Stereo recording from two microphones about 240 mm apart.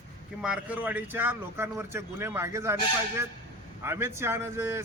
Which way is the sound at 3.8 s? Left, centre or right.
Centre.